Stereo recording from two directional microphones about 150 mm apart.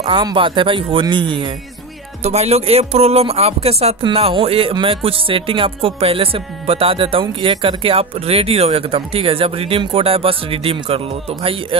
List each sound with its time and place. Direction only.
0.0 s speech: 30° right (ahead or behind)
2.2 s speech: 45° right (ahead or behind)